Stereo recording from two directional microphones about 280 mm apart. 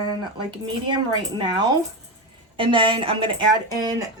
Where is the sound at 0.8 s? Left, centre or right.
Centre.